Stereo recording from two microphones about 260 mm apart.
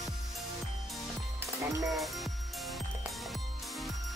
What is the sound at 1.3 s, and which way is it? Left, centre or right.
Music, centre.